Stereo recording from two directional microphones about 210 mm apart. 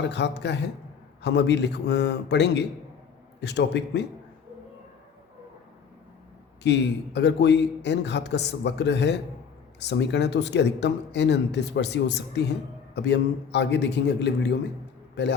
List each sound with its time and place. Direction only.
0.0 s a man's voice: 55° left (ahead or behind)
6.6 s a man's voice: 55° left (ahead or behind)